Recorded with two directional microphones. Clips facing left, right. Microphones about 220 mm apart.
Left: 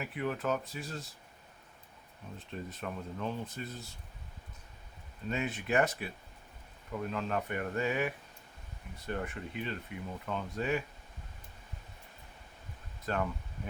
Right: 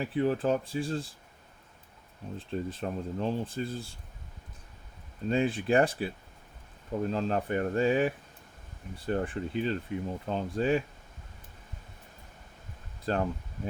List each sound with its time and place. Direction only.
0.0 s speech: 30° right (ahead or behind)
2.4 s speech: 30° right (ahead or behind)
5.3 s speech: 30° right (ahead or behind)
13.1 s speech: 30° right (ahead or behind)